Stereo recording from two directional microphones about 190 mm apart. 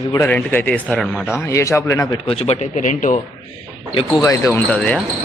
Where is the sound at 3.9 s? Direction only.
20° left (ahead or behind); by 5.0 s 5° left (ahead or behind).